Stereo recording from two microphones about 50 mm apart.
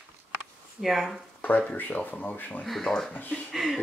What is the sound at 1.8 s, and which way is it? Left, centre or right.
Speech, left.